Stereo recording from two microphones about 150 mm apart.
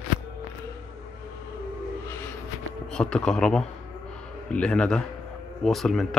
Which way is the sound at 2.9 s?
5° left (ahead or behind).